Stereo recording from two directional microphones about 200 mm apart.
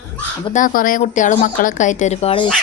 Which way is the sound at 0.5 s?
45° left (ahead or behind).